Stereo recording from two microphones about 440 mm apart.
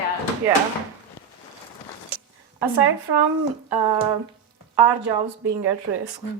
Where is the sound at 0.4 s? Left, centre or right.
Centre.